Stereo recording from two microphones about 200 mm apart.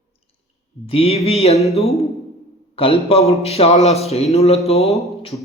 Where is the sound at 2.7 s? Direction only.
30° left (ahead or behind).